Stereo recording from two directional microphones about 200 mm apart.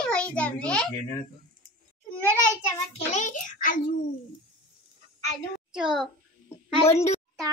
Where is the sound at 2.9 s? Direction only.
35° left (ahead or behind).